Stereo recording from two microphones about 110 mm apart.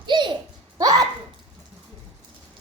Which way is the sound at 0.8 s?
35° right (ahead or behind).